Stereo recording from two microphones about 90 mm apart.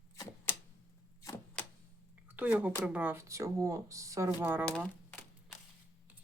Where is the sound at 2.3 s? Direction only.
20° right (ahead or behind).